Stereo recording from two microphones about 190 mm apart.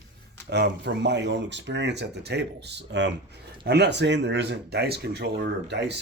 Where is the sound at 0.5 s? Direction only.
65° right (ahead or behind).